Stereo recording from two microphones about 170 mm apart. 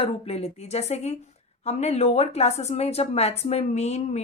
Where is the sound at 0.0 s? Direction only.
35° left (ahead or behind).